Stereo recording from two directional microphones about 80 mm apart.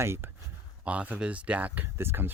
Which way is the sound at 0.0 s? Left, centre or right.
Right.